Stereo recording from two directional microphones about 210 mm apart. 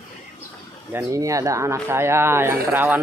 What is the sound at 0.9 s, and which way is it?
Speech, 15° right (ahead or behind).